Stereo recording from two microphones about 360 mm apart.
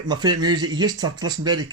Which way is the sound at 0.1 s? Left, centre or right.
Centre.